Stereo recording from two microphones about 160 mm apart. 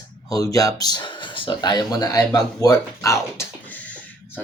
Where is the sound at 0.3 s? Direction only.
20° left (ahead or behind).